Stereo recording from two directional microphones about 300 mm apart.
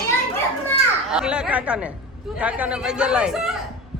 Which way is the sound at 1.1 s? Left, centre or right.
Centre.